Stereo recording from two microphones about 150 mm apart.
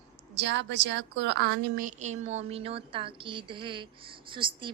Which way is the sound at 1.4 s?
90° right.